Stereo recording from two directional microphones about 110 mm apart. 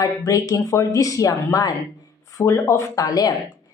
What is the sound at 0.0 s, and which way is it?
A woman's voice, 35° left (ahead or behind).